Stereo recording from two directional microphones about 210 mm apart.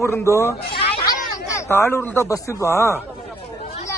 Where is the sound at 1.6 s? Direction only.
10° left (ahead or behind).